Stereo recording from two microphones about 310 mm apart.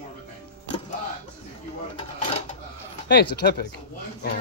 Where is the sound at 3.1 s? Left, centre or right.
Left.